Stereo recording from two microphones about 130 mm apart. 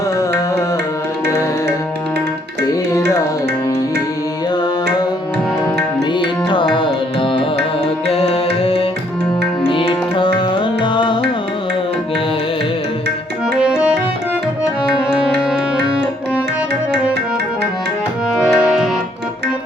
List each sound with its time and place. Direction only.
6.1 s music: 40° left (ahead or behind)
13.6 s music: 5° right (ahead or behind)
14.9 s music: 5° right (ahead or behind)
18.4 s music: 5° right (ahead or behind)